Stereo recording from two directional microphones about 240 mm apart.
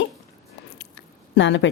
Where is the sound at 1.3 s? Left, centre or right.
Left.